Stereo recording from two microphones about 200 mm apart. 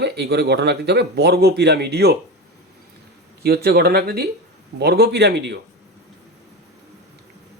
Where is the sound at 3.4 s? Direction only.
50° right (ahead or behind).